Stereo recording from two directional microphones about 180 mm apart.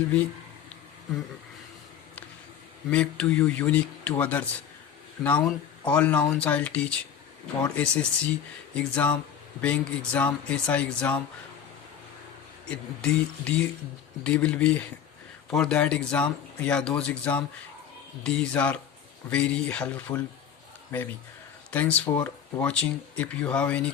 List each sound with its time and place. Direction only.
2.9 s speech: 5° left (ahead or behind)
12.6 s speech: 5° left (ahead or behind)
21.7 s speech: 10° left (ahead or behind)